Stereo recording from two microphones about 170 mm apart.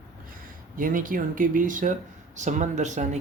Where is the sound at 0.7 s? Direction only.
55° right (ahead or behind).